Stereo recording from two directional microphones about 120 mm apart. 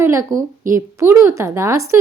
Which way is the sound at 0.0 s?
25° right (ahead or behind).